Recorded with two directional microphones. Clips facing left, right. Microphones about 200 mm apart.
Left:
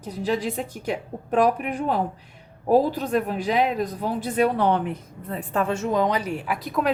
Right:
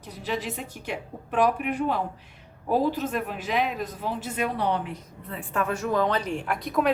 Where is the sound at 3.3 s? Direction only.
40° left (ahead or behind).